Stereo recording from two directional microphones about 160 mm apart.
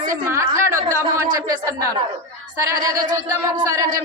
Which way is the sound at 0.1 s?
20° right (ahead or behind).